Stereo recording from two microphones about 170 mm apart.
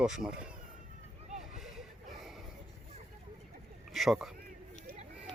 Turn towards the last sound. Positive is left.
turn(degrees=0)  # may be behind; listen again after turning